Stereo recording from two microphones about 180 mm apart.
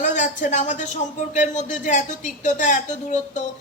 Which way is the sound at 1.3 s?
45° left (ahead or behind).